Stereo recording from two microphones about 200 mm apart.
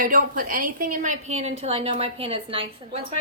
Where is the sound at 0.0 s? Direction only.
40° right (ahead or behind).